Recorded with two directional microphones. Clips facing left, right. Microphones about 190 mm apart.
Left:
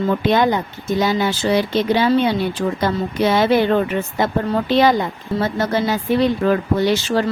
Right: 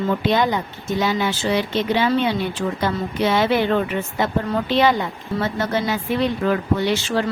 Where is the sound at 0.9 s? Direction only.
40° left (ahead or behind).